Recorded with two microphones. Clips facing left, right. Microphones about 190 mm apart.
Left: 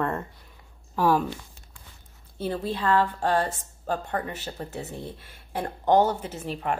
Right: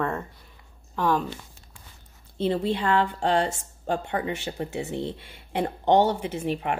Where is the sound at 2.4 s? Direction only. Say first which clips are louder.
Right 3 dB; 20° right (ahead or behind).